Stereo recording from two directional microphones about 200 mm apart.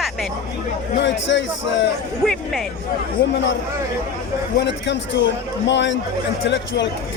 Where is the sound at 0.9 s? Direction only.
65° left (ahead or behind).